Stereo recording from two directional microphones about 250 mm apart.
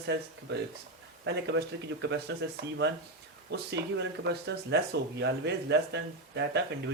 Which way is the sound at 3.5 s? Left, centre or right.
Right.